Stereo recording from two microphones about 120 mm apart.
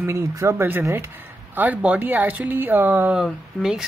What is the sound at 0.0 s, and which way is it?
Speech, 25° right (ahead or behind).